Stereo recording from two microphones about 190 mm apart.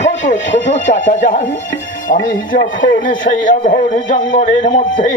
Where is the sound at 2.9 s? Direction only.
45° left (ahead or behind).